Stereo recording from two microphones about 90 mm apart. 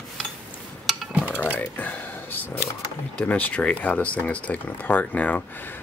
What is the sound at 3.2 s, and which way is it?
Speech, 15° left (ahead or behind).